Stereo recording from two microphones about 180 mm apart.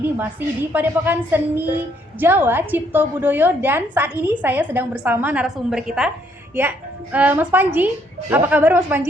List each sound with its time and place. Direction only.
0.0 s a woman's voice: 10° right (ahead or behind)